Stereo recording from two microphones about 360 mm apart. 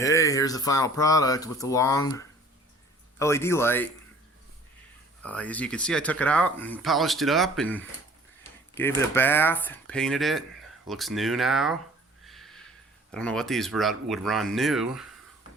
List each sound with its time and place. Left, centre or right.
0.0 s speech: centre
5.2 s speech: centre
12.2 s a sound: centre
13.1 s speech: centre